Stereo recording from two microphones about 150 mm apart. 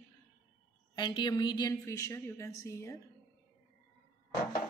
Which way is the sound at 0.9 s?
30° left (ahead or behind).